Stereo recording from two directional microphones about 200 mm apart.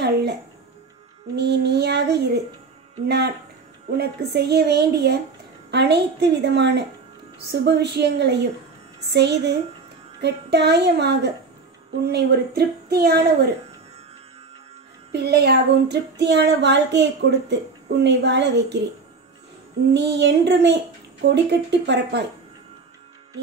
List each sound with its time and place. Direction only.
0.0 s a sound: 55° right (ahead or behind)
1.3 s a woman's voice: 55° right (ahead or behind)
15.1 s speech: 55° right (ahead or behind)
19.9 s speech: 60° right (ahead or behind)